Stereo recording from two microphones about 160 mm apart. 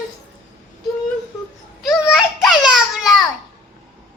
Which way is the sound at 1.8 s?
Centre (ahead or behind).